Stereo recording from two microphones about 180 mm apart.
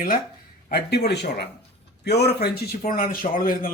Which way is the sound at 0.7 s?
60° left (ahead or behind).